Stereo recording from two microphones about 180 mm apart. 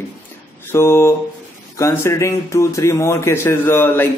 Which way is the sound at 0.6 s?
15° left (ahead or behind).